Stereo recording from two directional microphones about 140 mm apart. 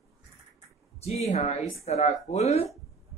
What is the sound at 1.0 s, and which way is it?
A woman's voice, 50° left (ahead or behind).